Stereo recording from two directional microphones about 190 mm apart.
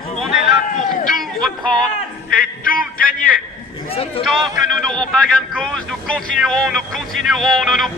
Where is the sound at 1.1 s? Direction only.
Centre (ahead or behind).